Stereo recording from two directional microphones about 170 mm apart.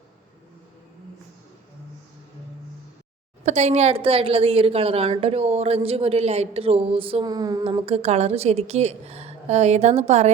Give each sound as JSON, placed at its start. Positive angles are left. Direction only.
{"t": 3.4, "sound": "a woman's voice", "side_deg": -40}
{"t": 7.6, "sound": "a woman's voice", "side_deg": -35}